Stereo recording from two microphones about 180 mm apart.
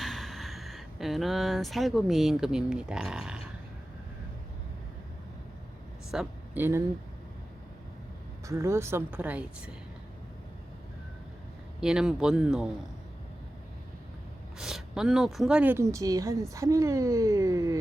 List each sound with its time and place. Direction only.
0.0 s speech: centre (ahead or behind)
6.1 s speech: 5° right (ahead or behind)
8.4 s speech: 15° right (ahead or behind)
11.8 s speech: 5° right (ahead or behind)
14.6 s speech: centre (ahead or behind); by 17.7 s 20° right (ahead or behind)